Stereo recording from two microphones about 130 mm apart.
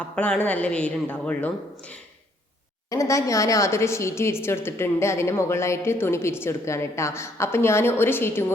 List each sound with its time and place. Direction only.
0.0 s a woman's voice: 10° left (ahead or behind)
2.9 s a woman's voice: 25° left (ahead or behind)